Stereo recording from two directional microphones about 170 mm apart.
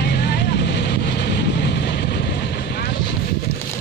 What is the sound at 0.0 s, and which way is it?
Vehicle, 70° left (ahead or behind).